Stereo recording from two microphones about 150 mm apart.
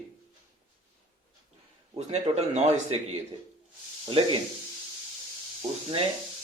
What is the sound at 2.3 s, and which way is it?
Speech, 35° right (ahead or behind).